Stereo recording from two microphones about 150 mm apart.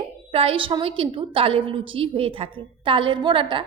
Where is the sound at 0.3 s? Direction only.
40° right (ahead or behind).